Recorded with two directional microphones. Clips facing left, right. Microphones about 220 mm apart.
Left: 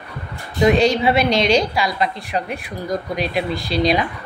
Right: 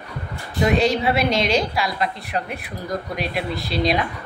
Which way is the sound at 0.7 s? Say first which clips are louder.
Left 3 dB; centre (ahead or behind).